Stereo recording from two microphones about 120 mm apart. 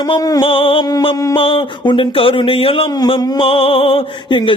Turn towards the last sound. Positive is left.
turn(degrees=45)  # may be behind; listen again after turning